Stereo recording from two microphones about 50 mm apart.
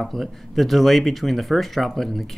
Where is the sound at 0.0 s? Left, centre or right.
Centre.